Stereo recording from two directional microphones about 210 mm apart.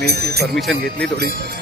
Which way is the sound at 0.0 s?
50° right (ahead or behind).